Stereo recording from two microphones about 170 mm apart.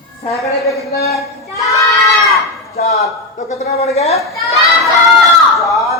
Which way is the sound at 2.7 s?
40° left (ahead or behind).